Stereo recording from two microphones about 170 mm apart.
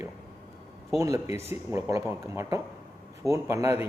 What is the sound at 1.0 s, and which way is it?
A man's voice, 15° right (ahead or behind).